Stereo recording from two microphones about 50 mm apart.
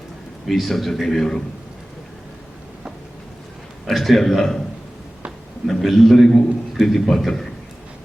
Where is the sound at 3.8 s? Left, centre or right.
Centre.